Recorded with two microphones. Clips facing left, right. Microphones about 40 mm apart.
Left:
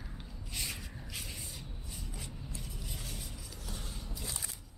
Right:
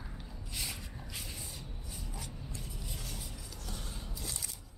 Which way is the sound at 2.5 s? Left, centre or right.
Centre.